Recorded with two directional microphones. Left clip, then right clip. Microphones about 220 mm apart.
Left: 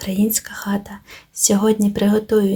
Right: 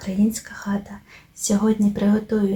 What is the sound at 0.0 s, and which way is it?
A woman's voice, 40° left (ahead or behind).